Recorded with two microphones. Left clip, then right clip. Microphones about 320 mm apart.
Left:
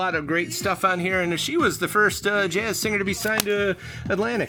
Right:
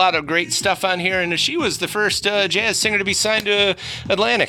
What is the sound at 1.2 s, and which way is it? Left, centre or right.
Speech, centre.